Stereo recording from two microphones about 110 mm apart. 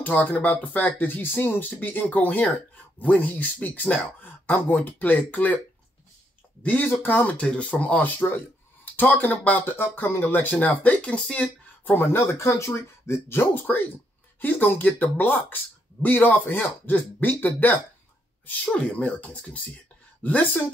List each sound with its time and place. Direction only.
0.0 s speech: 15° left (ahead or behind)
6.6 s speech: 15° left (ahead or behind)